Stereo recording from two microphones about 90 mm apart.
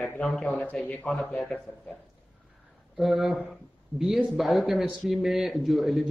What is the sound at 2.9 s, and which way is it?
A man's voice, centre (ahead or behind).